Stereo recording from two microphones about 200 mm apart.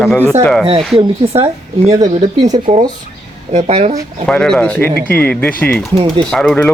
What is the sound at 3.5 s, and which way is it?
Speech, 30° right (ahead or behind).